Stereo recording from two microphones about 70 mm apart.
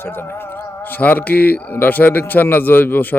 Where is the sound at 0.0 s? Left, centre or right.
Left.